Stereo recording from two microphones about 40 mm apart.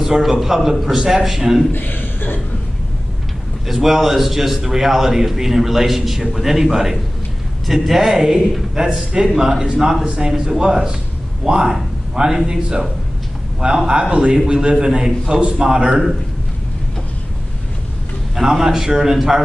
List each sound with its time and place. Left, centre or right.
0.0 s a man's voice: centre
1.7 s a man's voice: left
3.6 s a man's voice: centre
10.0 s a man's voice: right
10.3 s a man's voice: centre
18.3 s a man's voice: centre